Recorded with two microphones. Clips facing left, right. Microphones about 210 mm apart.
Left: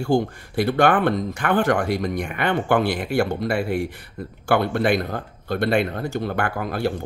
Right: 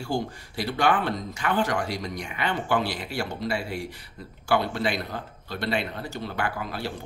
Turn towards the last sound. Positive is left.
turn(degrees=50)  # may be behind; listen again after turning